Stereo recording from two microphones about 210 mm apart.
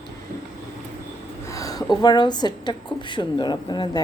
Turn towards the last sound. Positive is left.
turn(degrees=20)  # may be behind; listen again after turning